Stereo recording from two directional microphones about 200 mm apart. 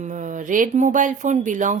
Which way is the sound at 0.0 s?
40° right (ahead or behind).